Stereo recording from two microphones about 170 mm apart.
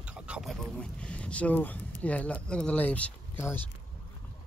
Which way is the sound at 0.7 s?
5° left (ahead or behind).